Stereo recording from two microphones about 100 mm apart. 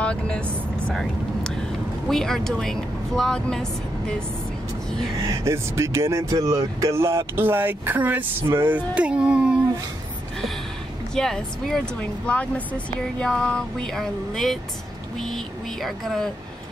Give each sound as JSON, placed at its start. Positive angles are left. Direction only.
{"t": 0.0, "sound": "speech", "side_deg": 10}
{"t": 5.2, "sound": "speech", "side_deg": -30}
{"t": 11.1, "sound": "speech", "side_deg": 5}